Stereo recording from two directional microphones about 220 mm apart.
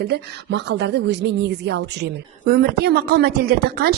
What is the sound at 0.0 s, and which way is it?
A woman's voice, 50° right (ahead or behind).